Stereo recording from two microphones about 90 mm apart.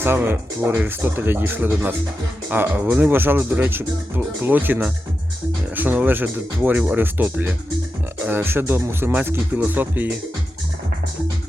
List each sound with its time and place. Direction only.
0.0 s speech: 25° right (ahead or behind)